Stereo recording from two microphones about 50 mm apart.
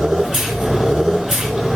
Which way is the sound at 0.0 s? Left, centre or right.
Centre.